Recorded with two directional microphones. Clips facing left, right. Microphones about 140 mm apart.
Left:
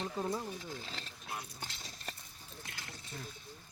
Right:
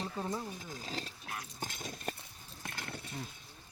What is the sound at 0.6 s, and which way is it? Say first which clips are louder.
Speech: right 3 dB; 45° right (ahead or behind).